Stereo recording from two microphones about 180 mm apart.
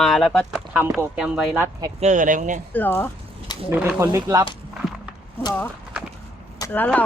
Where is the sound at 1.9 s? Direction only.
40° right (ahead or behind).